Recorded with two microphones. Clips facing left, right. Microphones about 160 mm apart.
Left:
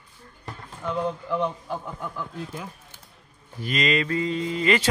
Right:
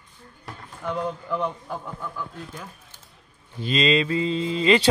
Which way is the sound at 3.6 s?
25° right (ahead or behind).